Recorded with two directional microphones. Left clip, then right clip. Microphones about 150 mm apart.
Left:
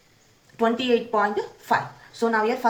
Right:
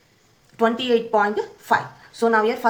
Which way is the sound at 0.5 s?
35° right (ahead or behind).